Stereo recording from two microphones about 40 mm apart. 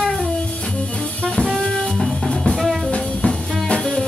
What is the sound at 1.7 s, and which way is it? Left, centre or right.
Music, left.